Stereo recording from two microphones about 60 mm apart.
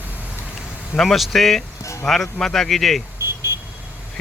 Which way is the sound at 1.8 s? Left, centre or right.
Left.